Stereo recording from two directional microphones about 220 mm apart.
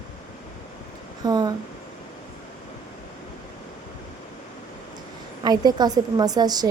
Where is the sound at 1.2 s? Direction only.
20° right (ahead or behind).